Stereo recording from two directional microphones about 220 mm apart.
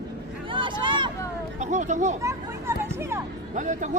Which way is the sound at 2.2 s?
10° right (ahead or behind).